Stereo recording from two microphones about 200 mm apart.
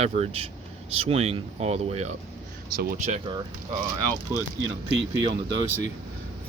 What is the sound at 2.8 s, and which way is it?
Speech, 50° right (ahead or behind).